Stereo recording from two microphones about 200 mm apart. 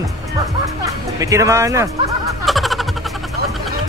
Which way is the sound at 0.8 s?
15° right (ahead or behind).